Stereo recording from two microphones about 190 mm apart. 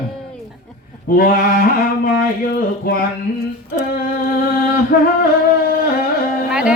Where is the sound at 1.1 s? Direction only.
50° left (ahead or behind).